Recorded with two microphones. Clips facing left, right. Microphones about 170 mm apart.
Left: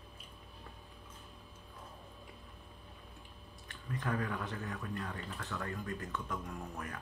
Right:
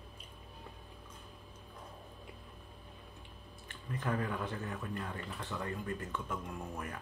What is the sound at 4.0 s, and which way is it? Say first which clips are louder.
A man's voice: right 1 dB; 5° right (ahead or behind).